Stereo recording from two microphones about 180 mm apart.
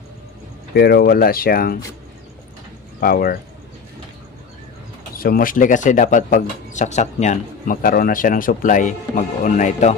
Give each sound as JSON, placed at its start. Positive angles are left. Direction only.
{"t": 0.7, "sound": "speech", "side_deg": 65}
{"t": 3.0, "sound": "speech", "side_deg": 55}
{"t": 5.1, "sound": "speech", "side_deg": 55}